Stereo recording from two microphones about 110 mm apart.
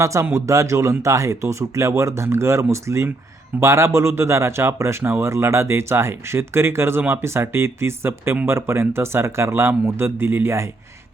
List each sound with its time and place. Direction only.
0.0 s speech: 25° right (ahead or behind)